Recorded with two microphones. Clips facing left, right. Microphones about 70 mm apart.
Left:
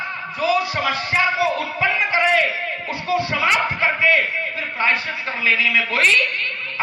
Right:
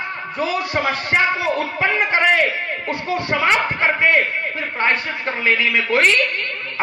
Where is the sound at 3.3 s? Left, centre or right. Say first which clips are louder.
Right 6 dB; right.